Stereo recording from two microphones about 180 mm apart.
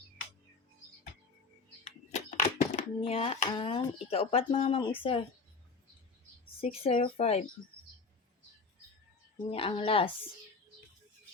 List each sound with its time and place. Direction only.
1.8 s a sound: 40° left (ahead or behind)
4.1 s speech: 30° left (ahead or behind)
6.6 s speech: 35° left (ahead or behind)
9.5 s speech: 30° left (ahead or behind)